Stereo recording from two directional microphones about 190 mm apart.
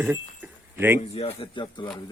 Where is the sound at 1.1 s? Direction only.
30° left (ahead or behind).